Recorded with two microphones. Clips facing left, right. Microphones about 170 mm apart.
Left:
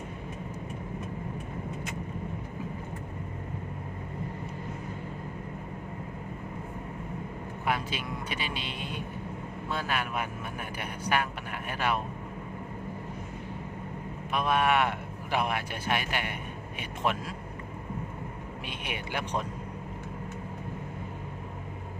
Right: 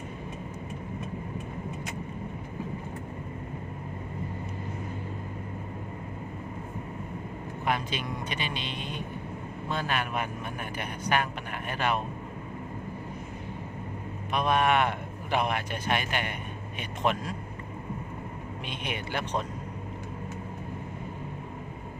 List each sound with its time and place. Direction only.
7.6 s speech: 5° left (ahead or behind)
14.3 s a man's voice: 5° left (ahead or behind)
18.7 s speech: 10° left (ahead or behind)